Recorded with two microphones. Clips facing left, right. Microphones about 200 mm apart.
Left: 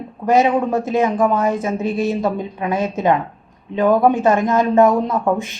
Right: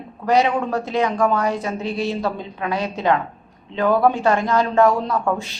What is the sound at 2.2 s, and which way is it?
A man's voice, 20° left (ahead or behind).